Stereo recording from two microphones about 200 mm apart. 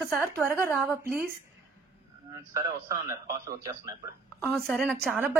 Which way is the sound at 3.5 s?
15° right (ahead or behind).